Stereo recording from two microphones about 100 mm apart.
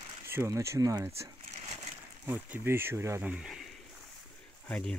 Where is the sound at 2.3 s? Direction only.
20° right (ahead or behind).